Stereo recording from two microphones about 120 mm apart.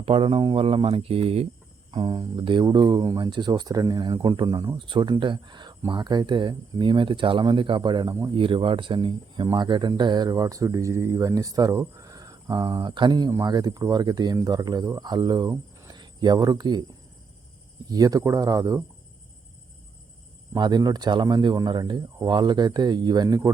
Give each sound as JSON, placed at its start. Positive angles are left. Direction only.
{"t": 0.0, "sound": "speech", "side_deg": -50}
{"t": 1.9, "sound": "speech", "side_deg": -40}
{"t": 4.4, "sound": "speech", "side_deg": -30}
{"t": 4.8, "sound": "speech", "side_deg": -40}
{"t": 17.8, "sound": "speech", "side_deg": -30}
{"t": 20.5, "sound": "speech", "side_deg": -35}